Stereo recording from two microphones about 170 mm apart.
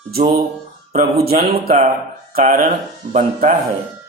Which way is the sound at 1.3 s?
60° right (ahead or behind).